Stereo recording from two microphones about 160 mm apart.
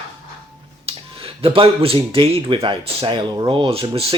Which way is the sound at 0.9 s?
35° right (ahead or behind).